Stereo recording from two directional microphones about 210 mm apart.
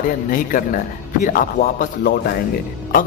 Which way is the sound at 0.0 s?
40° left (ahead or behind).